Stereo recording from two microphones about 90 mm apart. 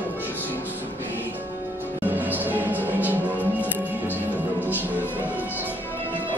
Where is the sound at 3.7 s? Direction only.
20° left (ahead or behind).